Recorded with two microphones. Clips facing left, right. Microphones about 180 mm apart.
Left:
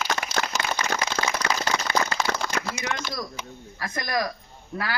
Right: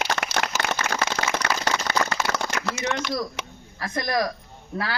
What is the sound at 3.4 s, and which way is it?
Speech, 75° right (ahead or behind).